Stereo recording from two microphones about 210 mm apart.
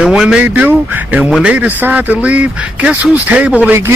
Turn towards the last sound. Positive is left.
turn(degrees=-10)  # may be behind; listen again after turning